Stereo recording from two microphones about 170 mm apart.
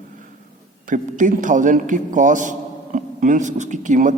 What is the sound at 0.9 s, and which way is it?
A man's voice, 50° right (ahead or behind).